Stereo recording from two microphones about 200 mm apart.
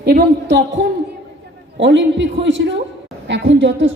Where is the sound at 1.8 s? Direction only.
65° right (ahead or behind).